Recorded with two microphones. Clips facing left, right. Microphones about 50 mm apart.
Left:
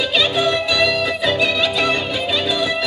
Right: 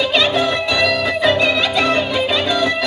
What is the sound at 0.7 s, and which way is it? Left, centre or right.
Music, centre.